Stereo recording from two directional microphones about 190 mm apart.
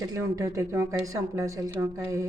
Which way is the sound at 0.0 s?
20° right (ahead or behind).